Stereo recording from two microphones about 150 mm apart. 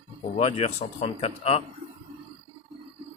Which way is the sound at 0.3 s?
45° left (ahead or behind).